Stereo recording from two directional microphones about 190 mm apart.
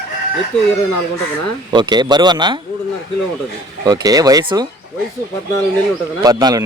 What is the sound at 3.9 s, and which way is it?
Speech, 20° right (ahead or behind).